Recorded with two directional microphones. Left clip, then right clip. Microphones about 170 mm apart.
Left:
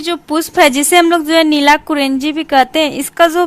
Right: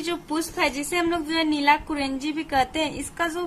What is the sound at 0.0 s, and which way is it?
A woman's voice, 40° left (ahead or behind).